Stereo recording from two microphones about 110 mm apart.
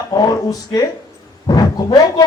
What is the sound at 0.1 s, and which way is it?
Speech, 35° left (ahead or behind).